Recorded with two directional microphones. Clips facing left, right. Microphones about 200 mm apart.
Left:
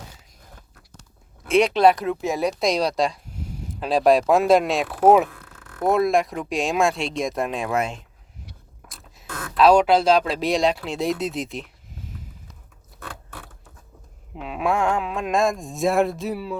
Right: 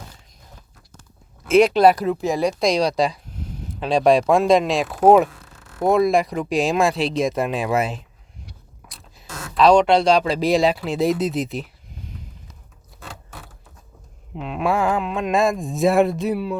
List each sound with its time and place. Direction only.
1.5 s speech: centre (ahead or behind)
5.3 s a sound: 55° left (ahead or behind)
5.8 s speech: centre (ahead or behind)
8.8 s rodents: 50° left (ahead or behind)
9.2 s a sound: 55° left (ahead or behind)
9.6 s speech: 5° left (ahead or behind)
14.3 s speech: centre (ahead or behind)